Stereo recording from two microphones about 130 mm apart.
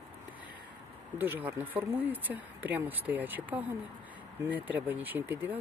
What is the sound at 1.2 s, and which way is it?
Speech, 15° right (ahead or behind).